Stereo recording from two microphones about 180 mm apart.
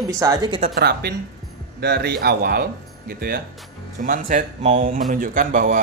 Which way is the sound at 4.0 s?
45° right (ahead or behind).